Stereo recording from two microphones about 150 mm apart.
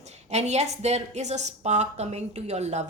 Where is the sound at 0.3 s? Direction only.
50° right (ahead or behind).